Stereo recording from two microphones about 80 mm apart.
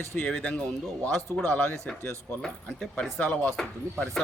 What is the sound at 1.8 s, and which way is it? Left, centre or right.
Speech, centre.